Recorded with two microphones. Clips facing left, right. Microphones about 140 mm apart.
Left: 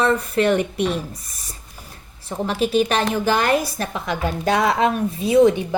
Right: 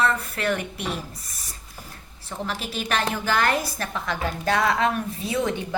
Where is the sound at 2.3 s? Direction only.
20° left (ahead or behind).